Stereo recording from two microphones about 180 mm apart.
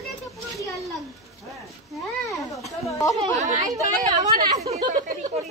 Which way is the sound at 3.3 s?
40° right (ahead or behind).